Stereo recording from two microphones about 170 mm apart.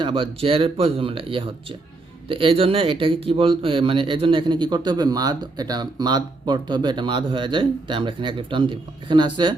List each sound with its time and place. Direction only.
0.0 s speech: 30° right (ahead or behind)